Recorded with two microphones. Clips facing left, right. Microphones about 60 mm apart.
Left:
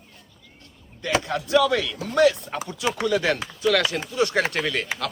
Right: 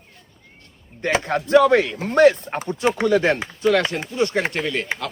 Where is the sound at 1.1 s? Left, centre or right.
Right.